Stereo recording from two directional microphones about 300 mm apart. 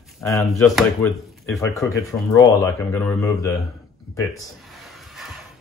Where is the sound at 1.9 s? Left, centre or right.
Centre.